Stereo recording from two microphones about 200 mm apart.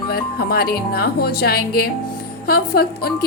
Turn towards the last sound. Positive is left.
turn(degrees=50)  # may be behind; listen again after turning